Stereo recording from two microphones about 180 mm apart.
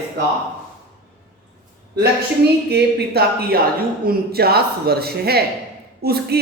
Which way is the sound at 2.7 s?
65° right (ahead or behind).